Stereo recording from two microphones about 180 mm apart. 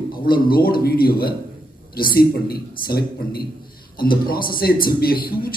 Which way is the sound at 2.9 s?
55° left (ahead or behind).